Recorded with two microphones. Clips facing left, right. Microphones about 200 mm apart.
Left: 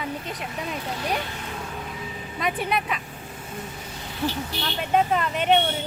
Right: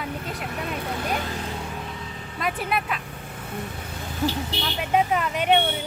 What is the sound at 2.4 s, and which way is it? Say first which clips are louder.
Speech: left 1 dB; centre (ahead or behind).